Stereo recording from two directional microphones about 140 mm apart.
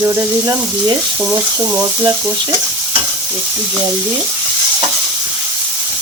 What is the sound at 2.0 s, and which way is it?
Sizzle, 30° right (ahead or behind).